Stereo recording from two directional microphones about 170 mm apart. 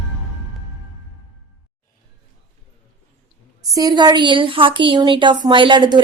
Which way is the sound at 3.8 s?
25° right (ahead or behind).